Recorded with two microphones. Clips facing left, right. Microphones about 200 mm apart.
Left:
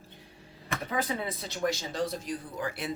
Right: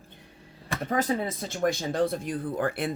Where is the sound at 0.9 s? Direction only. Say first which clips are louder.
Right 6 dB; 45° right (ahead or behind).